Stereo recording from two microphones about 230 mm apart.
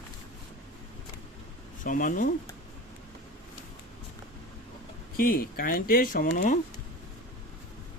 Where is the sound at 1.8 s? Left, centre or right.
Left.